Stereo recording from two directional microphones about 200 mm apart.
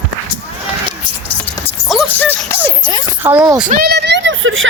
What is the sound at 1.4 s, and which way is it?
Music, 5° left (ahead or behind).